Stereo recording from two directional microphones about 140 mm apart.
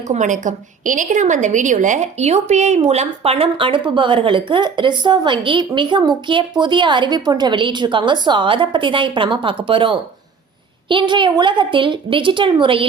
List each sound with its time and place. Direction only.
0.1 s a woman's voice: 60° right (ahead or behind); by 12.9 s 40° right (ahead or behind)